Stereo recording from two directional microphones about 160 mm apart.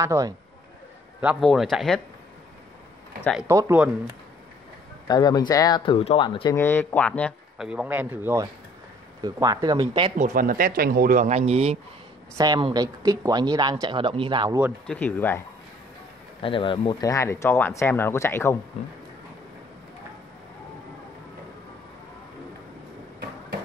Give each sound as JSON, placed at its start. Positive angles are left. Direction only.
{"t": 0.0, "sound": "a man's voice", "side_deg": -20}
{"t": 1.4, "sound": "speech", "side_deg": 0}
{"t": 3.4, "sound": "a man's voice", "side_deg": -20}
{"t": 5.0, "sound": "speech", "side_deg": 25}
{"t": 6.5, "sound": "speech", "side_deg": 15}
{"t": 7.5, "sound": "a man's voice", "side_deg": -5}
{"t": 10.1, "sound": "speech", "side_deg": -55}
{"t": 12.4, "sound": "speech", "side_deg": -25}
{"t": 14.9, "sound": "speech", "side_deg": 10}
{"t": 16.3, "sound": "speech", "side_deg": 35}
{"t": 17.1, "sound": "speech", "side_deg": 20}